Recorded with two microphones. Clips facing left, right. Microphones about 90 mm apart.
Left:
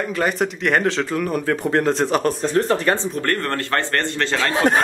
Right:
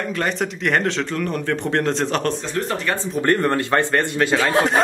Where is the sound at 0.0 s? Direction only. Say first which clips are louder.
Left 2 dB; 5° left (ahead or behind).